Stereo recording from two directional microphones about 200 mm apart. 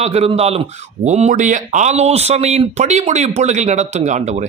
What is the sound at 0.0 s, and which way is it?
Speech, 30° right (ahead or behind).